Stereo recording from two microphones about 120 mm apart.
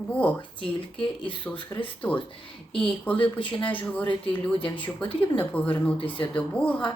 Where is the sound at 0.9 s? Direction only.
45° left (ahead or behind).